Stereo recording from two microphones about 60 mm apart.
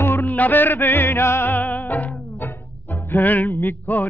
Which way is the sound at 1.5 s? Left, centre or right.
Left.